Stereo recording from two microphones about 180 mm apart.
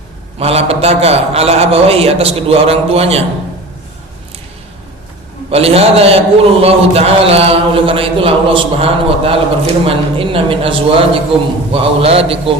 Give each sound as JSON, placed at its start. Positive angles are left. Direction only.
{"t": 0.3, "sound": "a man's voice", "side_deg": -35}
{"t": 5.5, "sound": "a man's voice", "side_deg": -35}